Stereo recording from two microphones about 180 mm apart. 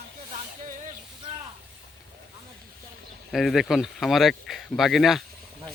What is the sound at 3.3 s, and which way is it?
Speech, centre (ahead or behind).